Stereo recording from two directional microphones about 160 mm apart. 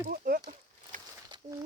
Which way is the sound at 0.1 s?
60° right (ahead or behind).